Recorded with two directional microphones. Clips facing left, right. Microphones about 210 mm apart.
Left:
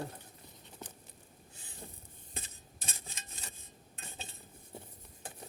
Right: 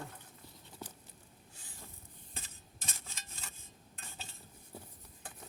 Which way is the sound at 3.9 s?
20° left (ahead or behind).